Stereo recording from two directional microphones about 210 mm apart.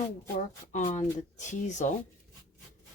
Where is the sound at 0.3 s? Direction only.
35° left (ahead or behind).